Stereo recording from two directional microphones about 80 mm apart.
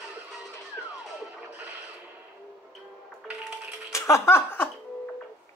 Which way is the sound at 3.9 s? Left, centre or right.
Left.